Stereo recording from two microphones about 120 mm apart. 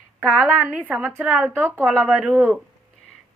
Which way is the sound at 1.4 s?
15° right (ahead or behind).